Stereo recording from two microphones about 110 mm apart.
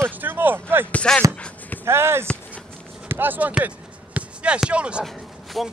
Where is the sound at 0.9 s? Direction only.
10° left (ahead or behind).